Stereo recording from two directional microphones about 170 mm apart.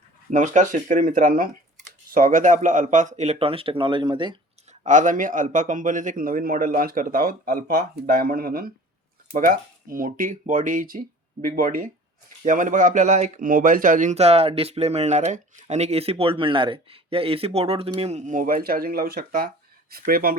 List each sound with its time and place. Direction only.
0.3 s speech: 45° right (ahead or behind); by 4.4 s 25° right (ahead or behind)
4.8 s a man's voice: 50° right (ahead or behind)